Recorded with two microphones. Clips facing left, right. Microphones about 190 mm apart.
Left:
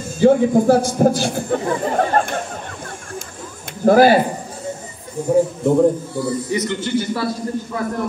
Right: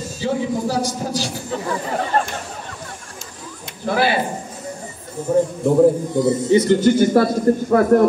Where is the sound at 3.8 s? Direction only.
45° left (ahead or behind).